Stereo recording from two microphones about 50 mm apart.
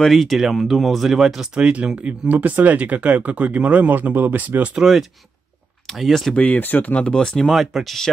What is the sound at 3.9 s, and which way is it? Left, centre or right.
Speech, right.